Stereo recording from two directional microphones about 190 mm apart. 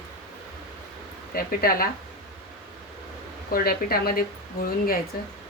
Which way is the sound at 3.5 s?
50° left (ahead or behind).